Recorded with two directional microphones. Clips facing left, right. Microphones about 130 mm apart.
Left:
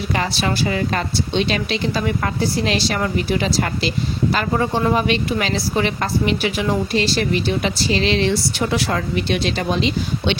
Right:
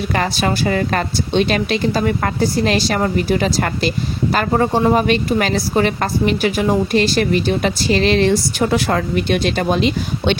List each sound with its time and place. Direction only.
0.1 s a woman's voice: 50° right (ahead or behind)